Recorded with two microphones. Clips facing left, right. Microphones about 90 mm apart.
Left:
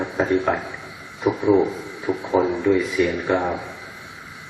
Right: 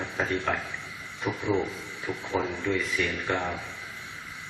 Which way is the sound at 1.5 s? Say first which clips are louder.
Left 11 dB; 40° left (ahead or behind).